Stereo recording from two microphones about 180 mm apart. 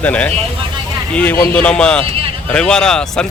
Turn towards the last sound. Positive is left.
turn(degrees=5)  # may be behind; listen again after turning